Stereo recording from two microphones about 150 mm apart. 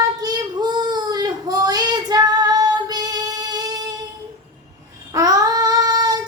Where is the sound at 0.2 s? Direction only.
25° right (ahead or behind).